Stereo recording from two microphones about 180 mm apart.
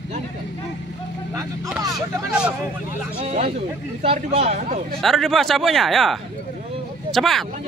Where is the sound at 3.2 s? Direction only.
35° right (ahead or behind).